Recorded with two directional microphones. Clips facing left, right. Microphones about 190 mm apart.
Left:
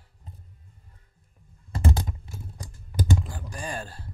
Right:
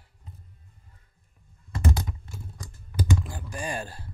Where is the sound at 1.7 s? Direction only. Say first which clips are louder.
Left 1 dB; 30° left (ahead or behind).